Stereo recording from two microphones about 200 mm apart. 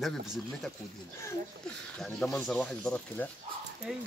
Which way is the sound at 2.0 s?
5° left (ahead or behind).